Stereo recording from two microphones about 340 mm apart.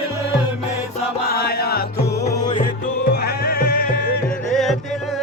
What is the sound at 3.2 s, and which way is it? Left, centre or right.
Music, left.